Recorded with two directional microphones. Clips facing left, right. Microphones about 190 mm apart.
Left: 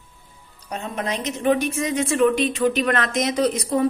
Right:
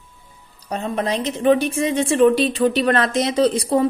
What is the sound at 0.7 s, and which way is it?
A woman's voice, 35° right (ahead or behind).